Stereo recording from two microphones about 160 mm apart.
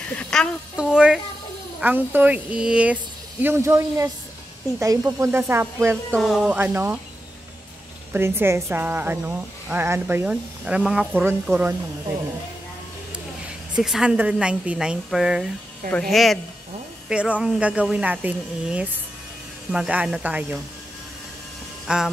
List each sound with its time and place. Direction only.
0.1 s a sound: 5° left (ahead or behind)
0.9 s a woman's voice: 5° right (ahead or behind)
3.4 s a woman's voice: 15° right (ahead or behind)
6.1 s a woman's voice: centre (ahead or behind)
8.1 s a woman's voice: 15° right (ahead or behind)
13.7 s a woman's voice: 5° right (ahead or behind)
21.8 s speech: 5° right (ahead or behind)